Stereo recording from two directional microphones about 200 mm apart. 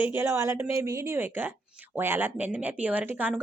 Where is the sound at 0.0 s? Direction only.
10° right (ahead or behind).